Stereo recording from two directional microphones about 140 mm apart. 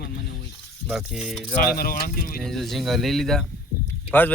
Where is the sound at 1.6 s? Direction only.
90° left.